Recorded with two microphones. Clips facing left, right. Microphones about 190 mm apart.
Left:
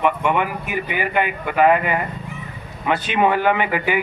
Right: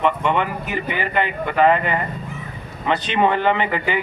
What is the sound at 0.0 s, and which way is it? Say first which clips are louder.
A man's voice: even; 10° left (ahead or behind).